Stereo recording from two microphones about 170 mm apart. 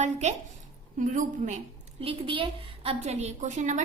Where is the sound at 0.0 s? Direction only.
40° right (ahead or behind).